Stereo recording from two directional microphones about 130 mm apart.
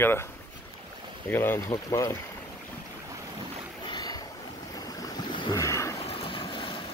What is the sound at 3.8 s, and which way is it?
Boat, 35° left (ahead or behind).